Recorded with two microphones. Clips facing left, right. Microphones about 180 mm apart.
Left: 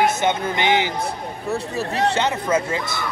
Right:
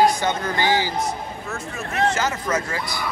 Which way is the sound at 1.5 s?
35° left (ahead or behind).